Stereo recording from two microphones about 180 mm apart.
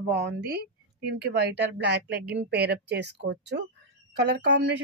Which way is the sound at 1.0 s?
65° right (ahead or behind).